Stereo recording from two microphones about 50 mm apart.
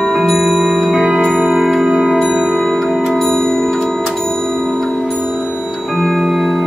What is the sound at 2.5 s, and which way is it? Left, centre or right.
Music, centre.